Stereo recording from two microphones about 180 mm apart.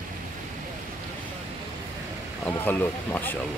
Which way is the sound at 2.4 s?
10° left (ahead or behind).